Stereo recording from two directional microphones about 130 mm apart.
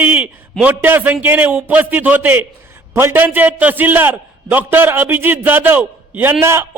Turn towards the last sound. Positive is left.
turn(degrees=-20)  # may be behind; listen again after turning